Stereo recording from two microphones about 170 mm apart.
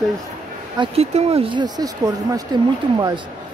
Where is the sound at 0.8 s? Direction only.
35° right (ahead or behind); by 2.4 s 20° right (ahead or behind).